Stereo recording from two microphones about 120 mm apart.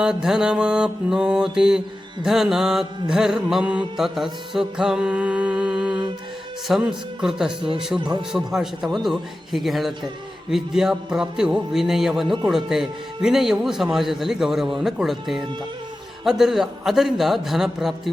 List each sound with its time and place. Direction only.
0.0 s mantra: 5° right (ahead or behind)
7.9 s speech: 40° right (ahead or behind)
8.3 s mantra: 5° right (ahead or behind)